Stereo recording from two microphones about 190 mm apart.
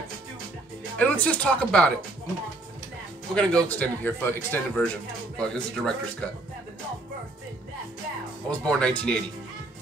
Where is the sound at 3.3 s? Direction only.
5° left (ahead or behind).